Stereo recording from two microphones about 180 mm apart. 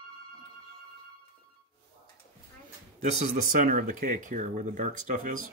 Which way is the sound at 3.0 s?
40° right (ahead or behind).